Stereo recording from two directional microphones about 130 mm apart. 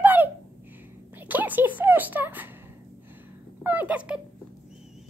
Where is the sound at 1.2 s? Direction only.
15° right (ahead or behind).